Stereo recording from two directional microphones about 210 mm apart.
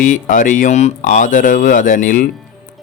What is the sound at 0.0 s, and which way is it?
Speech, 40° left (ahead or behind).